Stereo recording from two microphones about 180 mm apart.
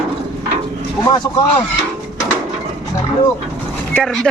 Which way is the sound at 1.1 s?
25° left (ahead or behind).